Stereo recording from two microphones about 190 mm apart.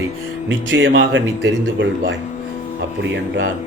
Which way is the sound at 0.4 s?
75° right (ahead or behind).